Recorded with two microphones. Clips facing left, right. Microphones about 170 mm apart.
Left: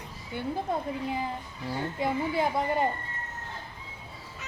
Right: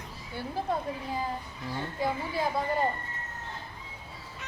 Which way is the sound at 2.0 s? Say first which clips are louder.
Left 2 dB; 20° left (ahead or behind).